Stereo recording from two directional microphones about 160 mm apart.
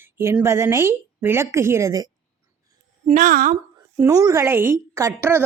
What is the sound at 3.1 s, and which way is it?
Speech, 60° right (ahead or behind).